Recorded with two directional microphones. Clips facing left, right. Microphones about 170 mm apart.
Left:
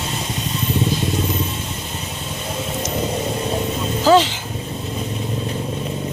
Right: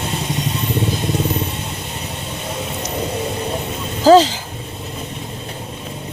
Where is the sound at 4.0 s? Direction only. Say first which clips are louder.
Right 4 dB; 40° right (ahead or behind).